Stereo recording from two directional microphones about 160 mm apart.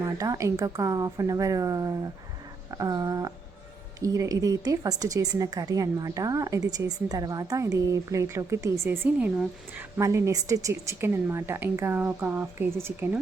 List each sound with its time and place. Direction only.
0.0 s a woman's voice: 20° right (ahead or behind)